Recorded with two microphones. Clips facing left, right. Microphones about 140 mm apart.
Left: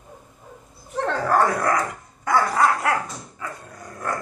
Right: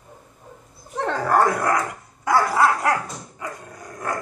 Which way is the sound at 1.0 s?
15° right (ahead or behind).